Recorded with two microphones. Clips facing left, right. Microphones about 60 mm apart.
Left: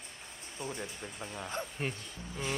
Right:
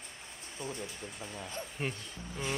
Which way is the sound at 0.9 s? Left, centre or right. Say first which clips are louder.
Left 1 dB; centre.